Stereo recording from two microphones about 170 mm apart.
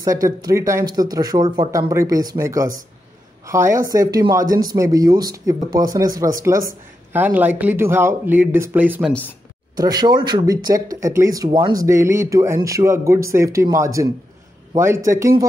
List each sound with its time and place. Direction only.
0.0 s speech: 20° right (ahead or behind)
9.8 s speech: 25° right (ahead or behind)